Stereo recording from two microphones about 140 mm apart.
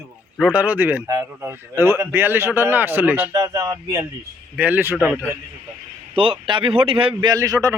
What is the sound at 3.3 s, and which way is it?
Speech, 25° right (ahead or behind).